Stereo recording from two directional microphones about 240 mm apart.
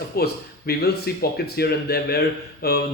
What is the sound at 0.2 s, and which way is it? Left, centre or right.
Speech, left.